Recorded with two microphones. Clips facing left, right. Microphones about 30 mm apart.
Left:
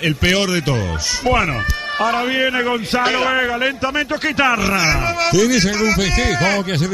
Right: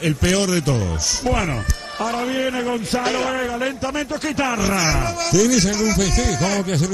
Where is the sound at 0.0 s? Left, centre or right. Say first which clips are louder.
Left 3 dB; left.